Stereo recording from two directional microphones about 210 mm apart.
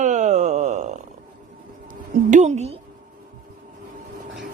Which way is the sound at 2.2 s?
35° right (ahead or behind).